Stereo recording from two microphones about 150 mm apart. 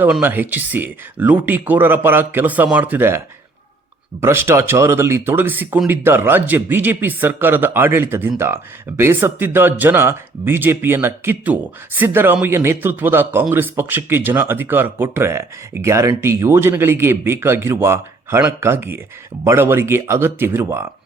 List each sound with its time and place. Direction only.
0.0 s speech: 10° right (ahead or behind)
4.2 s speech: 15° right (ahead or behind)